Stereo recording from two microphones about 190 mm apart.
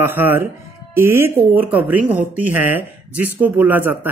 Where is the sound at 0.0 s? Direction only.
10° right (ahead or behind).